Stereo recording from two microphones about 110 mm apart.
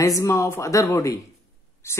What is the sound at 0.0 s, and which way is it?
Speech, 25° left (ahead or behind).